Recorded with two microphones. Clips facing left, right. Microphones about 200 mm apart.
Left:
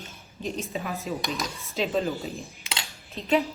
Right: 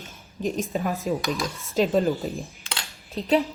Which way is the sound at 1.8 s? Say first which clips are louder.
Right 6 dB; 45° right (ahead or behind).